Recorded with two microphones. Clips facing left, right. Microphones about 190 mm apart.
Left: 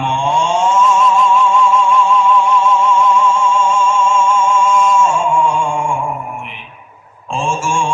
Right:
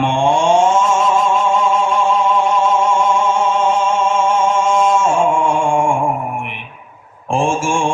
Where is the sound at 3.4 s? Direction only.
60° right (ahead or behind).